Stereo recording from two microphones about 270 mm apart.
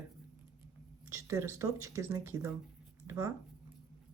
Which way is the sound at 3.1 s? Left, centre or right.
Centre.